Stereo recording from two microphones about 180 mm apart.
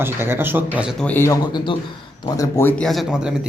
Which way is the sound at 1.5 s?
25° left (ahead or behind).